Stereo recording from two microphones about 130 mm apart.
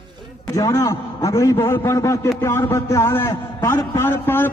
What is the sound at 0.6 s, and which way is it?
A man's voice, 25° left (ahead or behind).